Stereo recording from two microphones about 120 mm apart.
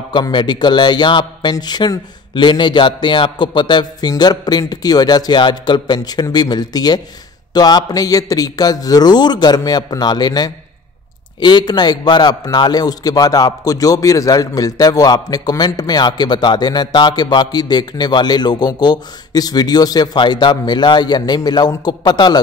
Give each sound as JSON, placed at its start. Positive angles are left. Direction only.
{"t": 0.1, "sound": "a man's voice", "side_deg": 40}